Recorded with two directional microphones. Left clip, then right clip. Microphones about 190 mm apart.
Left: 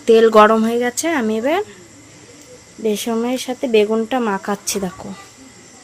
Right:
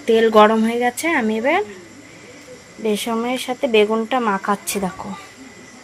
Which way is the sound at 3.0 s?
30° left (ahead or behind).